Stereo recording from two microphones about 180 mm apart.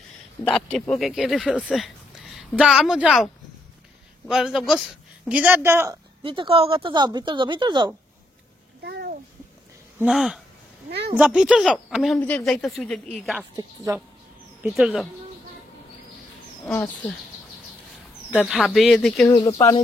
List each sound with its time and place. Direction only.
0.4 s speech: 5° left (ahead or behind)
4.3 s speech: centre (ahead or behind)
6.2 s a woman's voice: 30° right (ahead or behind)
8.8 s babbling: 60° right (ahead or behind)
9.9 s speech: centre (ahead or behind)
13.9 s speech: 15° right (ahead or behind)
14.6 s speech: centre (ahead or behind)
16.6 s speech: 10° left (ahead or behind)
18.3 s speech: centre (ahead or behind)